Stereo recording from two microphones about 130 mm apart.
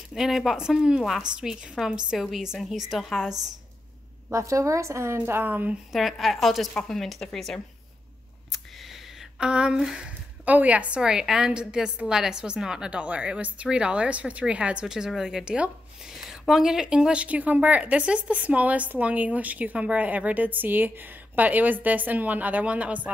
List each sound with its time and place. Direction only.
0.1 s a woman's voice: centre (ahead or behind)
4.3 s a woman's voice: 25° right (ahead or behind)
5.9 s a woman's voice: centre (ahead or behind)
9.4 s a woman's voice: 5° right (ahead or behind)